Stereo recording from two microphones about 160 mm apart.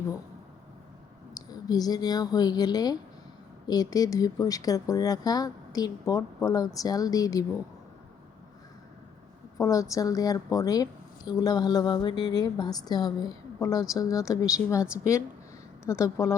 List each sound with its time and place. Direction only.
1.3 s a woman's voice: 25° left (ahead or behind)
9.6 s a woman's voice: 20° left (ahead or behind)